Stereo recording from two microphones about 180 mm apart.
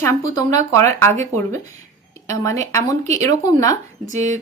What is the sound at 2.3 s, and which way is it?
Speech, 15° left (ahead or behind).